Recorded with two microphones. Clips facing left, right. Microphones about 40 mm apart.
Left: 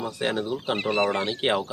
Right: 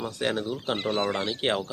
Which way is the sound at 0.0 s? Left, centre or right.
Centre.